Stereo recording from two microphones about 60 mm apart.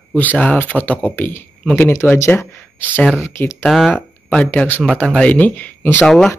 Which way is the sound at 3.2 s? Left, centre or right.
Left.